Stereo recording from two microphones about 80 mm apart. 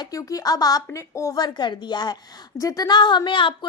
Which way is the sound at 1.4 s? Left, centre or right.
Left.